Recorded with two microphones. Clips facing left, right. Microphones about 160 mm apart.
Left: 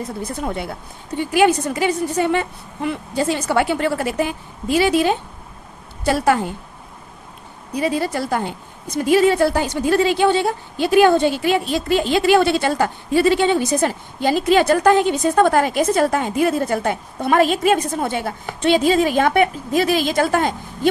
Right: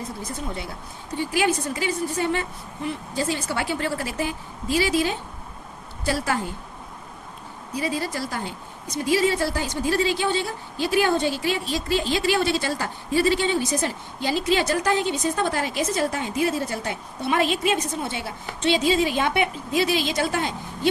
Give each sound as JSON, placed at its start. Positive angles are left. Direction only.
{"t": 0.2, "sound": "a woman's voice", "side_deg": 60}
{"t": 7.7, "sound": "a woman's voice", "side_deg": 65}